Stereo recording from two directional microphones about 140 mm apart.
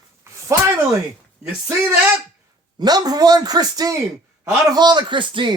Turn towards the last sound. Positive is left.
turn(degrees=-35)  # may be behind; listen again after turning